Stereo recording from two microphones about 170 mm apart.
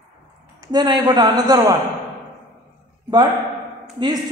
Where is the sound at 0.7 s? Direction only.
25° right (ahead or behind).